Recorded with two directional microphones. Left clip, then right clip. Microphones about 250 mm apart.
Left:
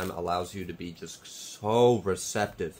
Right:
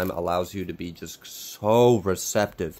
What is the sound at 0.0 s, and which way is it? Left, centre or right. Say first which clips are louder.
Speech: right 5 dB; right.